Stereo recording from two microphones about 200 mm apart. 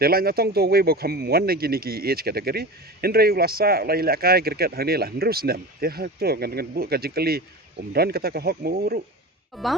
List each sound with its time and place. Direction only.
0.0 s speech: 50° right (ahead or behind)
9.5 s speech: centre (ahead or behind)